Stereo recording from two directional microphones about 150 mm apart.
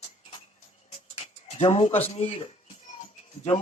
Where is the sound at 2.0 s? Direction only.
45° left (ahead or behind).